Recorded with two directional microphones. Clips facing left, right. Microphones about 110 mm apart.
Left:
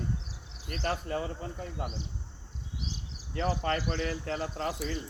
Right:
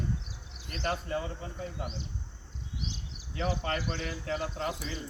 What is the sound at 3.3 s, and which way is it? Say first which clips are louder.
Speech: left 2 dB; 40° left (ahead or behind).